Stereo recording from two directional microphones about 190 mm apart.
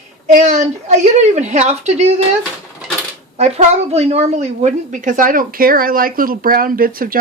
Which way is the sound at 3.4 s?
35° right (ahead or behind).